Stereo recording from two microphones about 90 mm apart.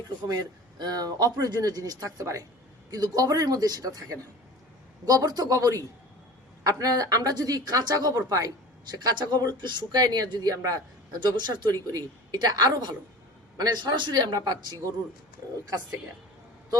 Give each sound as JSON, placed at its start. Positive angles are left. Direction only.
{"t": 0.3, "sound": "speech", "side_deg": -50}
{"t": 8.9, "sound": "speech", "side_deg": -55}
{"t": 11.2, "sound": "speech", "side_deg": -55}
{"t": 11.9, "sound": "speech", "side_deg": -45}